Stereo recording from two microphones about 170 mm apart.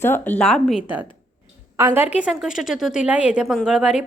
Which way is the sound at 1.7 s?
15° right (ahead or behind).